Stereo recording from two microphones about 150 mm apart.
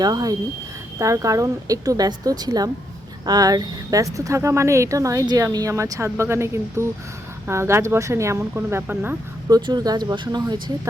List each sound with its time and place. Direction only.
0.0 s speech: 25° right (ahead or behind)
9.5 s speech: 30° right (ahead or behind)